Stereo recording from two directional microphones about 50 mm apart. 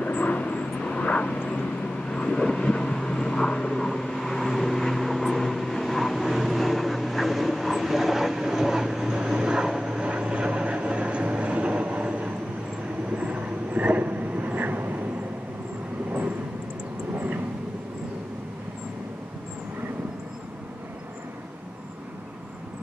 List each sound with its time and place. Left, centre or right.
0.0 s vehicle: left; by 15.0 s right
17.1 s vehicle: right